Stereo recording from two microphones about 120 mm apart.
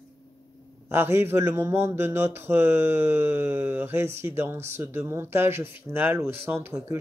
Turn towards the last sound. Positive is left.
turn(degrees=-20)  # may be behind; listen again after turning